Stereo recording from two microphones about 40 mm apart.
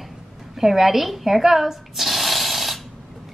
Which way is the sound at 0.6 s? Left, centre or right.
Centre.